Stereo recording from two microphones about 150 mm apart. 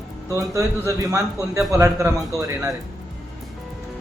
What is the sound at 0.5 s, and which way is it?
A man's voice, 20° right (ahead or behind).